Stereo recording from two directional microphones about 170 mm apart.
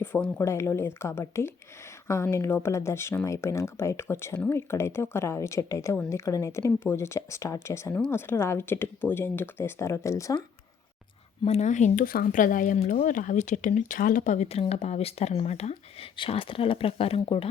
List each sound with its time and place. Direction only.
0.0 s speech: 10° left (ahead or behind)
11.4 s speech: 40° left (ahead or behind)